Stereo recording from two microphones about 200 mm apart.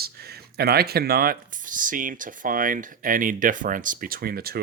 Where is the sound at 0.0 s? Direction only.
50° right (ahead or behind).